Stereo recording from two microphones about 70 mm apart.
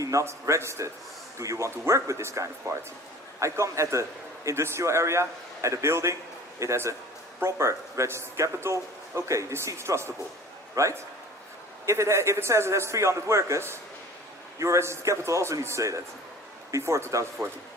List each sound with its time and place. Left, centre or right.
0.0 s a man's voice: right